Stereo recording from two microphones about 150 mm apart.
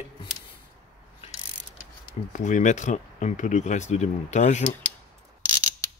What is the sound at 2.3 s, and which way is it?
Speech, 55° left (ahead or behind).